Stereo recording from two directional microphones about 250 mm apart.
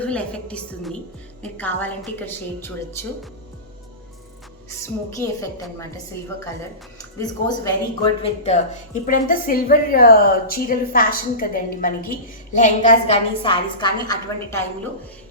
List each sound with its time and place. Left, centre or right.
0.0 s a woman's voice: centre
5.1 s a woman's voice: centre
7.2 s a woman's voice: centre